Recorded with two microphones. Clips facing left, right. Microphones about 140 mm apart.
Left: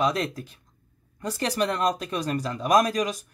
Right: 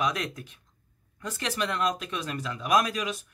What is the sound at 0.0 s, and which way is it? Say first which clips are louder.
Speech: left 5 dB; 30° left (ahead or behind).